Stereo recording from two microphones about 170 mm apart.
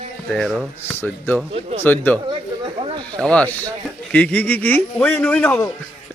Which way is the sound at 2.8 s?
30° right (ahead or behind).